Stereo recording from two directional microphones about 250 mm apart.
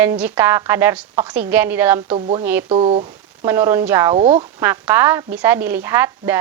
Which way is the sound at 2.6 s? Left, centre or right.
Right.